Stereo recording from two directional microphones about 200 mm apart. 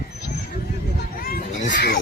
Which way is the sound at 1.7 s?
55° left (ahead or behind).